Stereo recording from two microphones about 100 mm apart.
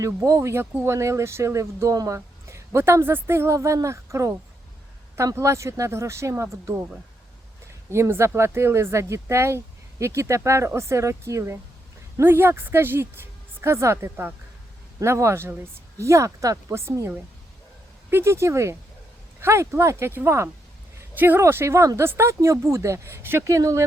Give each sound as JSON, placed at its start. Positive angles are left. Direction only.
{"t": 0.3, "sound": "speech", "side_deg": -30}
{"t": 7.9, "sound": "speech", "side_deg": -25}